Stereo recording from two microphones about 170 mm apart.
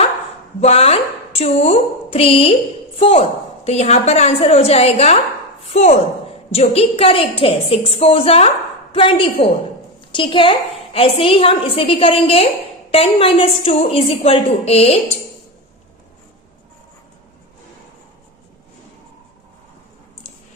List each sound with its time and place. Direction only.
0.6 s a woman's voice: 40° left (ahead or behind)